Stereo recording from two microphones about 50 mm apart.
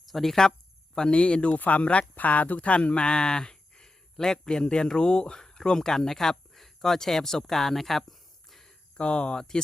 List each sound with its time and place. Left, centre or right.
0.0 s speech: centre
1.1 s speech: left; by 8.7 s centre
9.0 s speech: centre